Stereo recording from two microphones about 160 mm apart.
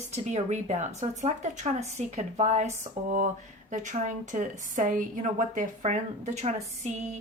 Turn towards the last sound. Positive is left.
turn(degrees=-45)  # may be behind; listen again after turning